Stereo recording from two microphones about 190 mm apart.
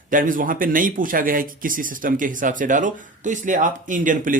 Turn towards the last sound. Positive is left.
turn(degrees=-45)  # may be behind; listen again after turning